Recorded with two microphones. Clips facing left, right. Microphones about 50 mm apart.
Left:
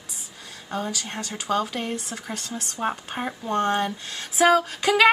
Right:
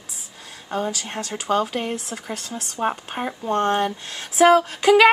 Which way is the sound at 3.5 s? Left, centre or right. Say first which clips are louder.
Right 3 dB; right.